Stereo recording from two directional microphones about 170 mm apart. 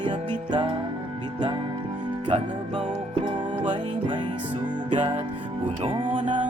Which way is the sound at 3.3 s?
25° right (ahead or behind).